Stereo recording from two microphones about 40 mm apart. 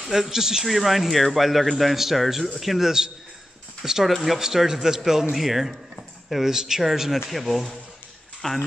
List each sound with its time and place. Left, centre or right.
0.0 s a man's voice: centre
0.7 s speech: centre
3.8 s a man's voice: centre
4.1 s speech: centre
4.4 s a man's voice: centre